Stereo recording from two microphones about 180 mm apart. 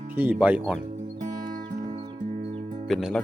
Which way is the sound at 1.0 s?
45° right (ahead or behind).